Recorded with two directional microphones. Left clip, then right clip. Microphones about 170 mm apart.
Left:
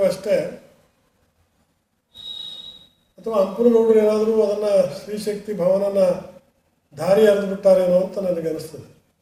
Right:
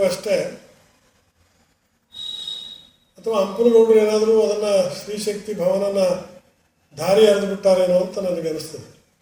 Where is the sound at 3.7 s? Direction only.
5° right (ahead or behind).